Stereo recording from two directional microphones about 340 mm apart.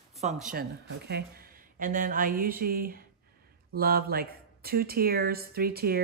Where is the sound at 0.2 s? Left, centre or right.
Right.